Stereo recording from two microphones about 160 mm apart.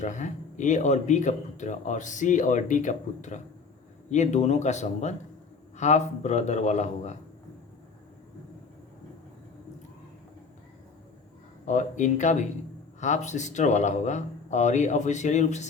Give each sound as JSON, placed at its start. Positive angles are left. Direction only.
{"t": 0.0, "sound": "speech", "side_deg": 50}
{"t": 11.6, "sound": "speech", "side_deg": 50}